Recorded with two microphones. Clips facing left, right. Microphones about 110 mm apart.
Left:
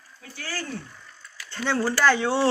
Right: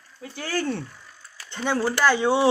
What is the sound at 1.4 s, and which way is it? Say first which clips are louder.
Speech: right 1 dB; 15° right (ahead or behind).